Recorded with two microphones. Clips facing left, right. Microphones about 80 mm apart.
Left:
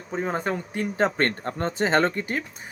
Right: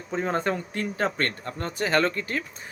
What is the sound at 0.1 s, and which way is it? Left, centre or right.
Speech, centre.